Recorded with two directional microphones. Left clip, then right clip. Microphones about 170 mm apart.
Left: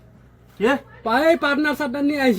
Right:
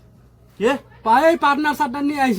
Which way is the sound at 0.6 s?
35° right (ahead or behind).